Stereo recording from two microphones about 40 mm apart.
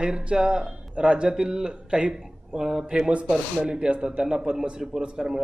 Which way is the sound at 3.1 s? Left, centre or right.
Right.